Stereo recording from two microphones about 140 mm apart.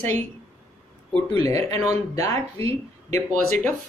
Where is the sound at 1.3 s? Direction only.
45° right (ahead or behind).